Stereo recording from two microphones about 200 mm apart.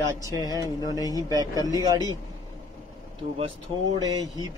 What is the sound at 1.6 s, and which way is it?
Speech, 20° left (ahead or behind).